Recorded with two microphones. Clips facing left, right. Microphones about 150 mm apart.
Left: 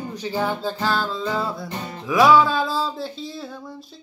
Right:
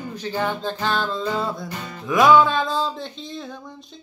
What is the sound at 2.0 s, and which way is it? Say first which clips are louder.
Music: even; centre (ahead or behind).